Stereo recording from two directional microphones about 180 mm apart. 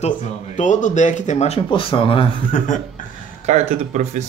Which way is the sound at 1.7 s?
30° left (ahead or behind).